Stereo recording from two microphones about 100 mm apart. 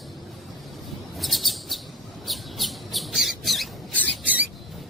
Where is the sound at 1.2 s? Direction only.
Centre (ahead or behind).